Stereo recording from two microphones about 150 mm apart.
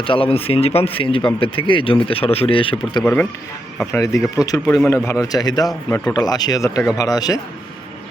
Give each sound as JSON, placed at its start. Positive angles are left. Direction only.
{"t": 0.0, "sound": "speech", "side_deg": 35}
{"t": 3.0, "sound": "speech", "side_deg": 10}
{"t": 3.9, "sound": "a man's voice", "side_deg": 20}